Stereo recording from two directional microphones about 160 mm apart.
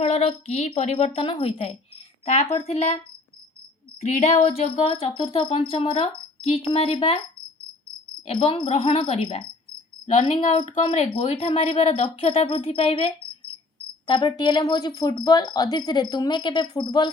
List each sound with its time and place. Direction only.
0.0 s a woman's voice: 40° left (ahead or behind)
4.0 s a sound: 45° left (ahead or behind)
4.4 s a woman's voice: 40° left (ahead or behind)
8.3 s a woman's voice: 40° left (ahead or behind)